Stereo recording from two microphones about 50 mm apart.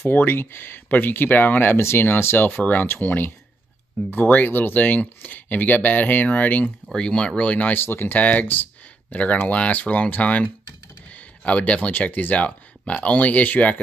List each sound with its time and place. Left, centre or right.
0.1 s speech: left
2.5 s speech: left
7.0 s speech: centre
7.7 s speech: left
8.2 s speech: left